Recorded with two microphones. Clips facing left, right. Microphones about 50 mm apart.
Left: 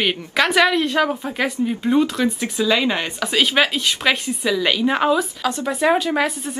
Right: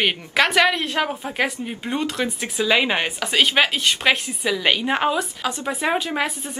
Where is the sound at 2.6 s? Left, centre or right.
Right.